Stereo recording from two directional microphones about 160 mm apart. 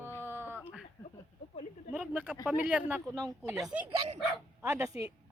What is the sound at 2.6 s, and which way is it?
Speech, 10° right (ahead or behind).